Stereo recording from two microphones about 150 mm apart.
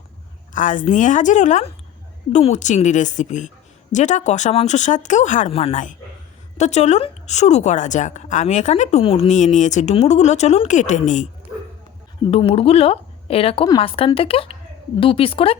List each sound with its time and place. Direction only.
0.5 s a woman's voice: 60° left (ahead or behind)
5.5 s a woman's voice: 40° left (ahead or behind)
12.3 s a woman's voice: 40° left (ahead or behind)